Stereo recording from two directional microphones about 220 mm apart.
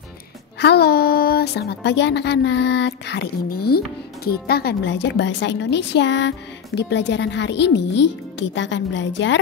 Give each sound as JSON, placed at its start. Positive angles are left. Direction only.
{"t": 0.6, "sound": "speech", "side_deg": 50}